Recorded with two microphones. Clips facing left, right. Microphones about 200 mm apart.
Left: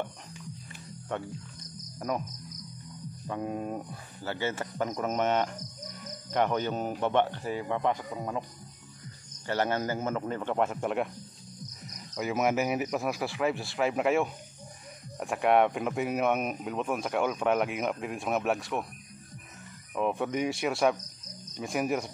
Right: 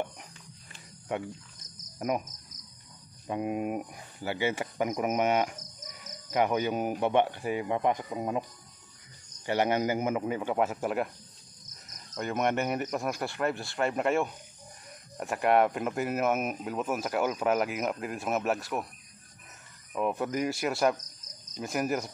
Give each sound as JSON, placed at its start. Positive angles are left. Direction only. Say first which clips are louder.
{"t": 1.1, "sound": "speech", "louder": "right 1 dB", "side_deg": -10}
{"t": 2.0, "sound": "cricket", "louder": "right 2 dB", "side_deg": -20}
{"t": 3.3, "sound": "speech", "louder": "right 3 dB", "side_deg": -15}
{"t": 9.5, "sound": "speech", "louder": "right 2 dB", "side_deg": -15}
{"t": 12.2, "sound": "speech", "louder": "left 1 dB", "side_deg": 5}
{"t": 19.9, "sound": "speech", "louder": "left 1 dB", "side_deg": 0}